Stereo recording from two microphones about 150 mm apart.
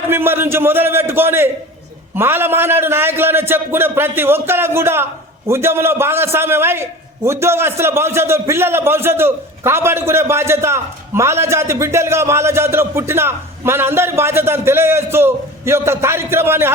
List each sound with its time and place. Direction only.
0.1 s a man's voice: 15° right (ahead or behind)